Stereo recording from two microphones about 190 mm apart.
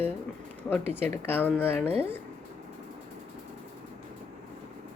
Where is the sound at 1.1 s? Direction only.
10° left (ahead or behind).